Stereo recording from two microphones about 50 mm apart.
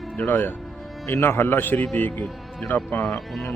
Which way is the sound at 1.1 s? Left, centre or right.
Left.